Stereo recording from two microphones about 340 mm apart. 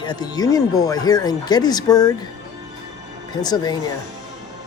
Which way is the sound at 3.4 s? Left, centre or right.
Centre.